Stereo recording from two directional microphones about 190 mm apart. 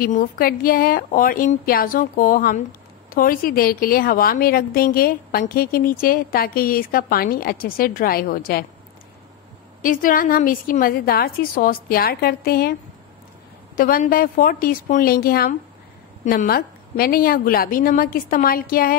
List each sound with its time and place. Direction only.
0.0 s a woman's voice: 50° left (ahead or behind)
9.8 s a woman's voice: 45° left (ahead or behind)
13.7 s a woman's voice: 50° left (ahead or behind)